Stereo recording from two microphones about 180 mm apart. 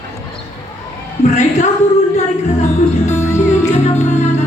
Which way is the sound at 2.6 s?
40° left (ahead or behind).